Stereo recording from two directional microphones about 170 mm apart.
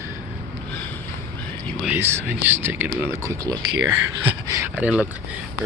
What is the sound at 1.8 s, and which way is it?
Speech, 10° right (ahead or behind).